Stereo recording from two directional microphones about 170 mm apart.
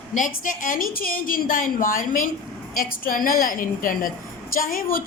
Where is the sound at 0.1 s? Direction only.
50° left (ahead or behind).